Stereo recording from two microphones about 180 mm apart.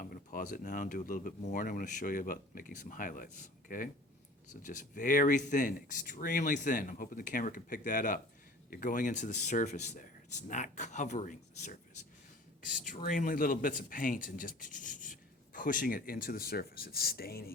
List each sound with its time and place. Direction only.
0.0 s speech: 50° left (ahead or behind)
12.8 s speech: 50° left (ahead or behind)